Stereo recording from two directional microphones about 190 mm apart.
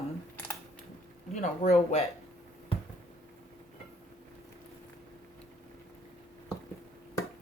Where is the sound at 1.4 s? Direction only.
35° left (ahead or behind).